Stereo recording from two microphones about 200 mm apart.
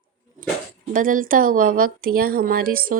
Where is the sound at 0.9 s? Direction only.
45° right (ahead or behind).